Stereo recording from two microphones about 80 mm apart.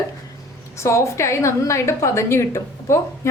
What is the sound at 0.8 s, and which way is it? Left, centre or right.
A woman's voice, left.